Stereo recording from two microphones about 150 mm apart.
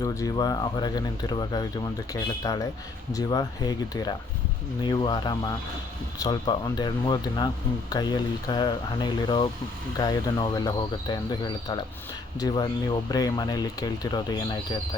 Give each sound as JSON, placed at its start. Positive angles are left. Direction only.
{"t": 0.0, "sound": "speech", "side_deg": 20}